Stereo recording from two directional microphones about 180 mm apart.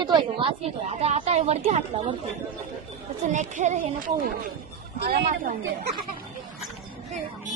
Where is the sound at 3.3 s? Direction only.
40° right (ahead or behind).